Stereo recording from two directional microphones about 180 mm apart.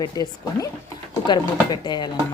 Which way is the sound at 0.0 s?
20° left (ahead or behind).